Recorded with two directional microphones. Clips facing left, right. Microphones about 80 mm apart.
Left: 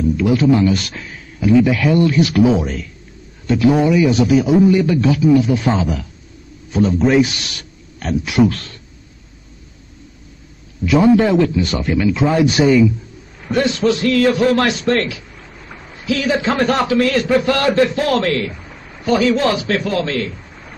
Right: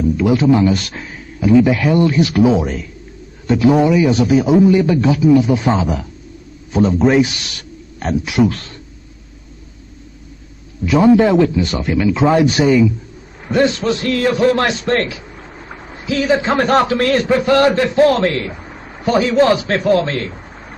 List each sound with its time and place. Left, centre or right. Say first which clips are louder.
0.2 s a man's voice: right 1 dB; centre
4.6 s a man's voice: right 1 dB; centre
8.4 s speech: left 1 dB; centre
11.1 s speech: right 2 dB; centre
11.5 s speech: right 1 dB; centre
12.6 s speech: left 3 dB; centre
13.5 s a man's voice: right 1 dB; right
17.3 s a man's voice: right 3 dB; right